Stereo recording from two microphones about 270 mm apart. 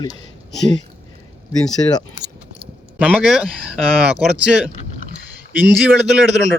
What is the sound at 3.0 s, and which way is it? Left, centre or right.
Speech, centre.